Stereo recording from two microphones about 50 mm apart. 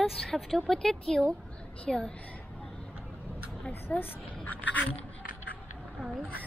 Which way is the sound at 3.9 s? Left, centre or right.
Left.